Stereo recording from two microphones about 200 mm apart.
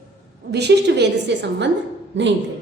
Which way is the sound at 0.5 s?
55° right (ahead or behind).